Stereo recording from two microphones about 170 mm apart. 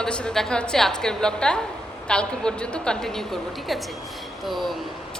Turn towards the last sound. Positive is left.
turn(degrees=0)  # may be behind; listen again after turning